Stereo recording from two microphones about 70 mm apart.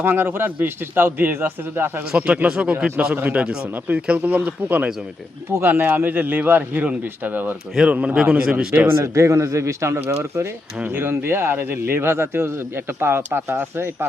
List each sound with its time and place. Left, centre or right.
0.0 s a man's voice: right
2.1 s a man's voice: centre
5.5 s a man's voice: right
7.9 s a man's voice: centre
9.1 s a man's voice: right